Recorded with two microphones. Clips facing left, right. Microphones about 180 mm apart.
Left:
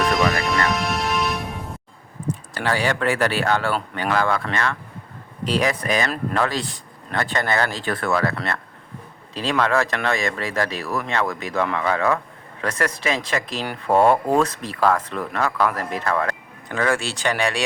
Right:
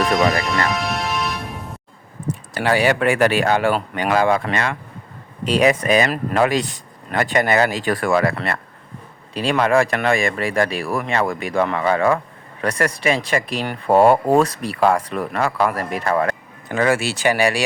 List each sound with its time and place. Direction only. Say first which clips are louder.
0.3 s music: right 1 dB; centre (ahead or behind)
2.6 s speech: right 5 dB; 10° right (ahead or behind)